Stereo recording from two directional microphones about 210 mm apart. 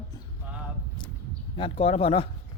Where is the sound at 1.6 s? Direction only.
30° left (ahead or behind).